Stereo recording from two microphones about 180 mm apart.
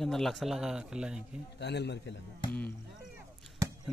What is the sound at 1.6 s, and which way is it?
Speech, 70° left (ahead or behind).